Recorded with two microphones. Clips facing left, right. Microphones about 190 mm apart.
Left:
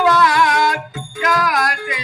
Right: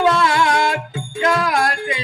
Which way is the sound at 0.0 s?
25° right (ahead or behind).